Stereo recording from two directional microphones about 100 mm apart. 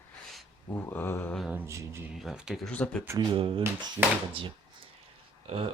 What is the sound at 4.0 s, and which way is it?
Speech, 45° right (ahead or behind).